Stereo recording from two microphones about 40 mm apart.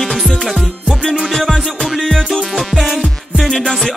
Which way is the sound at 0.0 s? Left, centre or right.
Centre.